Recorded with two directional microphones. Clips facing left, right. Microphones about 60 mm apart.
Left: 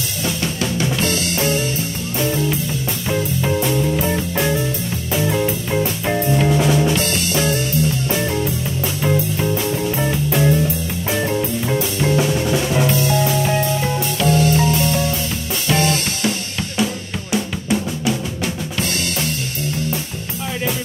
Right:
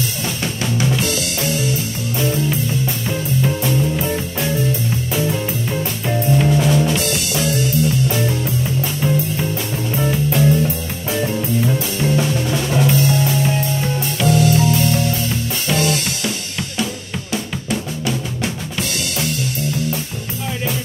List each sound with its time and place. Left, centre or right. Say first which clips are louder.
11.8 s music: left 1 dB; centre
17.3 s drum: left 3 dB; centre